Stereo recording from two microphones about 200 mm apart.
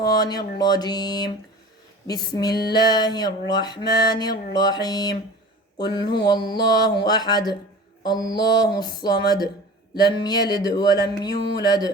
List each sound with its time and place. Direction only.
0.0 s music: 20° left (ahead or behind)